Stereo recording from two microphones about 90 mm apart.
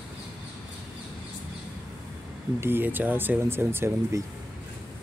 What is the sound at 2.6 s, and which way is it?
Speech, 25° right (ahead or behind).